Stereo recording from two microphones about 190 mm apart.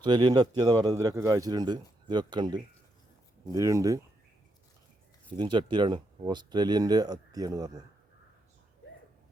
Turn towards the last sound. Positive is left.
turn(degrees=-20)  # may be behind; listen again after turning